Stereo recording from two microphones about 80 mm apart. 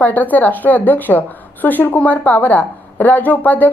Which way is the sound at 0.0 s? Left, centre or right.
Left.